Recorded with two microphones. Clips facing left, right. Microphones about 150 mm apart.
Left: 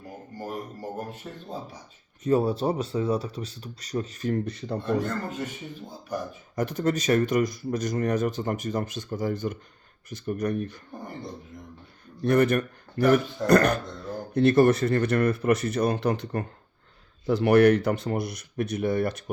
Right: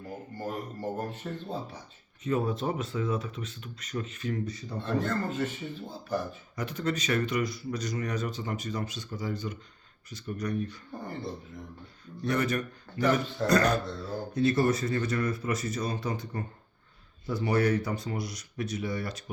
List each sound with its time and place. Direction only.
0.3 s speech: 15° left (ahead or behind)
2.2 s speech: 35° left (ahead or behind); by 4.8 s 60° left (ahead or behind)
4.9 s speech: 15° left (ahead or behind)
6.6 s speech: 45° left (ahead or behind)
12.2 s speech: 55° left (ahead or behind)